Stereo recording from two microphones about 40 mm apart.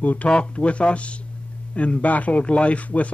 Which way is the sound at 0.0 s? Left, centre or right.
Left.